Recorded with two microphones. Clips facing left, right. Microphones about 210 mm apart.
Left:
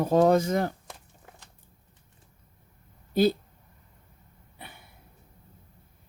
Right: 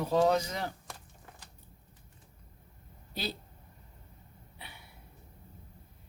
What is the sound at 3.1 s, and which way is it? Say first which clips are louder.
Speech: left 16 dB; 50° left (ahead or behind).